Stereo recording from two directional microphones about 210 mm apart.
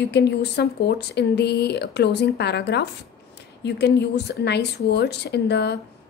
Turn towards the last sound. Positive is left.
turn(degrees=55)  # may be behind; listen again after turning